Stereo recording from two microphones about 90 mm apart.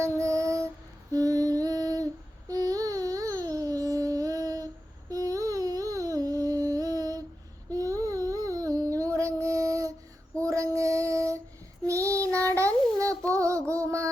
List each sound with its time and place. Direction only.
0.0 s child singing: 35° right (ahead or behind)
1.1 s female singing: 40° right (ahead or behind)
2.5 s a sound: 45° right (ahead or behind)
10.4 s female singing: 35° right (ahead or behind)
12.2 s child singing: 35° right (ahead or behind)
13.3 s music: 35° right (ahead or behind)